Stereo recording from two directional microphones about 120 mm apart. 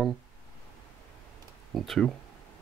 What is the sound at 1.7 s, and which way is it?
Speech, centre (ahead or behind).